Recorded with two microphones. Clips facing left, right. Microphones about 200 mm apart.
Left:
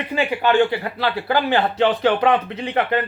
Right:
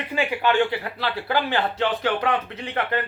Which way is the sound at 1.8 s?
20° left (ahead or behind).